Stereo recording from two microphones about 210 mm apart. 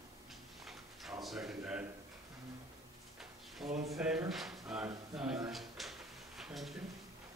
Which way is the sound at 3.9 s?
5° right (ahead or behind).